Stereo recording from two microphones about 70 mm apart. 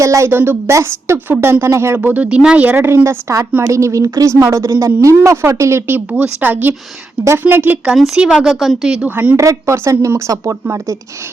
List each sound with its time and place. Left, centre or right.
0.0 s a woman's voice: right
0.3 s a woman's voice: right
0.7 s a woman's voice: right
2.0 s speech: right
2.7 s a woman's voice: right
5.9 s speech: centre
7.9 s speech: centre
9.0 s speech: right
9.4 s a woman's voice: right